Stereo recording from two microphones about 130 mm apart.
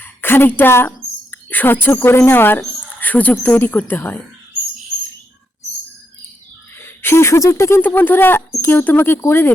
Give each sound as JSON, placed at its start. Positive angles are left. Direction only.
{"t": 0.0, "sound": "speech", "side_deg": 15}
{"t": 6.7, "sound": "speech", "side_deg": 15}